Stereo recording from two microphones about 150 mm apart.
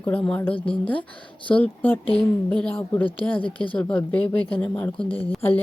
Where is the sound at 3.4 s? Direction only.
35° left (ahead or behind).